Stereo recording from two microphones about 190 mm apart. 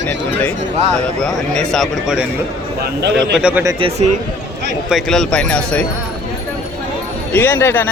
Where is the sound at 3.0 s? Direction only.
60° right (ahead or behind).